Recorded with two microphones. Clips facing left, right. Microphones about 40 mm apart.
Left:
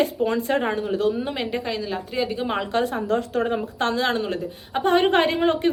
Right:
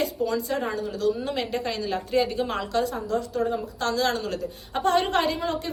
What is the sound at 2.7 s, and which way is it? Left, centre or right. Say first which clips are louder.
A woman's voice: left 3 dB; left.